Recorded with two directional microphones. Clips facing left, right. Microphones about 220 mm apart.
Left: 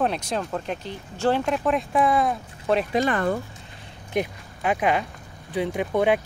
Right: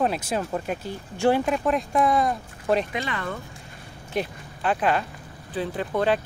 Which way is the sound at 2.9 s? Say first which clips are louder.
Left 8 dB; 45° left (ahead or behind).